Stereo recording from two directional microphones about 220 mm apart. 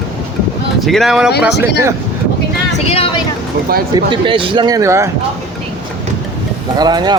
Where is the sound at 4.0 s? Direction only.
20° right (ahead or behind).